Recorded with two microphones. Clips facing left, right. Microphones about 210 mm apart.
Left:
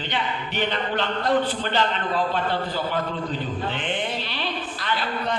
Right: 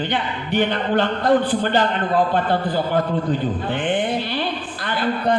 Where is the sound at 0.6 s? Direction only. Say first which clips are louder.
Right 7 dB; 50° right (ahead or behind).